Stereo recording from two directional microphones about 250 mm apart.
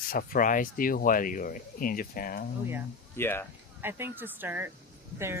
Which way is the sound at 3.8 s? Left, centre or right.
Centre.